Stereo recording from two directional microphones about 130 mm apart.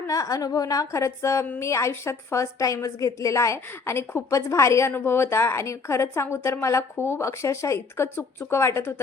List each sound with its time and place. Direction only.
0.1 s a woman's voice: 25° left (ahead or behind)